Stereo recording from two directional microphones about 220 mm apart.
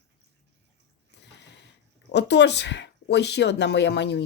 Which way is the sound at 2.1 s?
50° left (ahead or behind).